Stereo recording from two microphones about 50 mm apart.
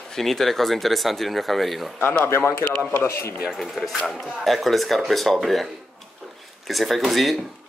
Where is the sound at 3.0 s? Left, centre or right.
Left.